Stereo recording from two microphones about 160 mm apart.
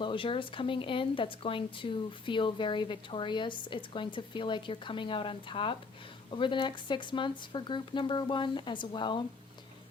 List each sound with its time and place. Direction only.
0.0 s speech: 30° left (ahead or behind)